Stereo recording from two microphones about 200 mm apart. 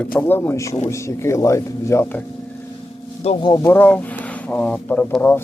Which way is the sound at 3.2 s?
30° left (ahead or behind).